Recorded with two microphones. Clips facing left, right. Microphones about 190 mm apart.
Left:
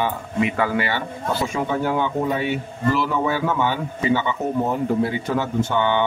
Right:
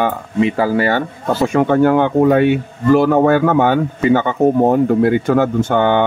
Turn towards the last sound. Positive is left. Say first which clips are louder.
# right 6 dB
turn(degrees=-50)  # may be behind; listen again after turning